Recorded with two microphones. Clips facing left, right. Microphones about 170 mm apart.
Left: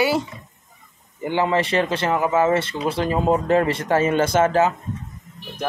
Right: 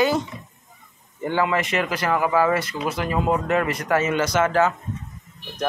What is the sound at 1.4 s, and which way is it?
Speech, 30° left (ahead or behind).